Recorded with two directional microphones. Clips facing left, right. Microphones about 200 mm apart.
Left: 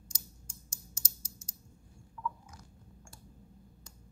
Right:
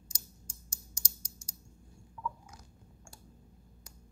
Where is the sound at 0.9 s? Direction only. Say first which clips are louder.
Even; 15° right (ahead or behind).